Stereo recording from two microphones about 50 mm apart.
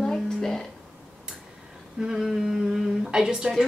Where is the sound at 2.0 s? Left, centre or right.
Centre.